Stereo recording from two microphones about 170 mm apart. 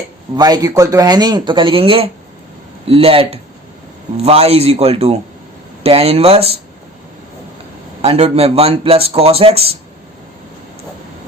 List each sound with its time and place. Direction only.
0.3 s speech: 25° right (ahead or behind)
8.0 s speech: 35° right (ahead or behind)